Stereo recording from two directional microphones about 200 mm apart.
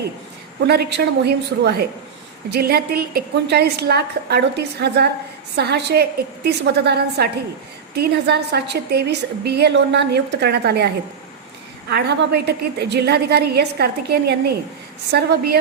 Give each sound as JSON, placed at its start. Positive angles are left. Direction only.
{"t": 0.6, "sound": "a woman's voice", "side_deg": -55}
{"t": 11.9, "sound": "a woman's voice", "side_deg": -55}